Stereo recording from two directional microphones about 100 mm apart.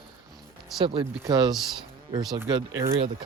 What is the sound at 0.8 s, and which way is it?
Speech, 60° right (ahead or behind).